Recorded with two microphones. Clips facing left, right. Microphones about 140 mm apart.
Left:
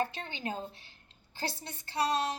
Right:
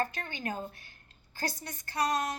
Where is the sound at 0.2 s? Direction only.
25° left (ahead or behind).